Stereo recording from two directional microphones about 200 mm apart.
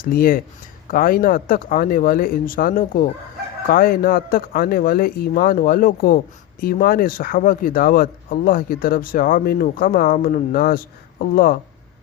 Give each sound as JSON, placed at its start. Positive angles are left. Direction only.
{"t": 0.0, "sound": "speech", "side_deg": 45}